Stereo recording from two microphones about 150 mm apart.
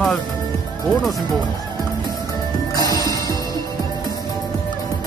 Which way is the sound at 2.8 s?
25° right (ahead or behind).